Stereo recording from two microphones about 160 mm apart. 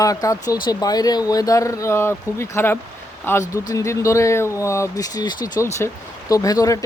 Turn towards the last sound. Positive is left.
turn(degrees=20)  # may be behind; listen again after turning